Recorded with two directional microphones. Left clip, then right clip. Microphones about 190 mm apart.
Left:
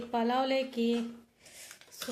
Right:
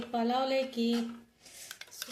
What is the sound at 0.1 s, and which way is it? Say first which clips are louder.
Speech: left 1 dB; centre (ahead or behind).